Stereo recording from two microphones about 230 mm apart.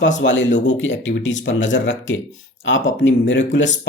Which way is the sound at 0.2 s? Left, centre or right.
Left.